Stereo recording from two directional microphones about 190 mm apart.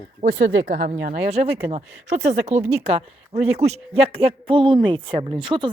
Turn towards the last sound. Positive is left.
turn(degrees=-25)  # may be behind; listen again after turning